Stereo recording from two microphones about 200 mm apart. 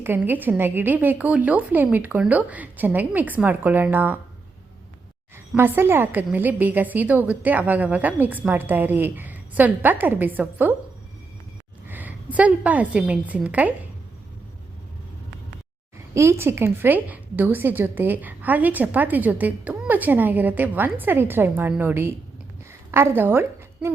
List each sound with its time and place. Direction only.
0.0 s a woman's voice: 10° right (ahead or behind)
5.5 s a woman's voice: 10° right (ahead or behind)
11.9 s a woman's voice: 10° right (ahead or behind)
16.1 s a woman's voice: 10° right (ahead or behind)